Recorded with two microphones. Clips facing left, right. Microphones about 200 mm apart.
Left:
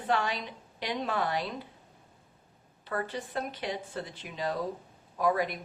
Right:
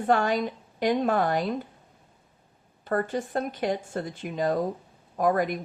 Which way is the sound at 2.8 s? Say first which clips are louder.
Right 7 dB; 50° right (ahead or behind).